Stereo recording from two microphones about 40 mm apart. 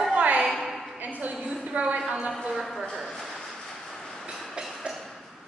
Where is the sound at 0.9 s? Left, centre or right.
Right.